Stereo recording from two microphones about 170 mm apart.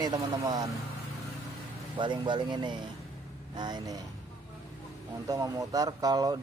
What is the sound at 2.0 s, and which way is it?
Speech, 30° right (ahead or behind).